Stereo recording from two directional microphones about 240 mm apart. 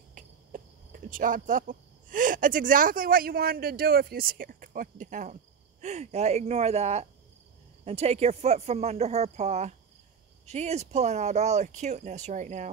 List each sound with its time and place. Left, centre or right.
0.1 s speech: right